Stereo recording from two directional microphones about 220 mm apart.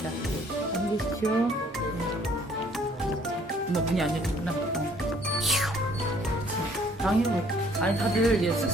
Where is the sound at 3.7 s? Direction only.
Centre (ahead or behind).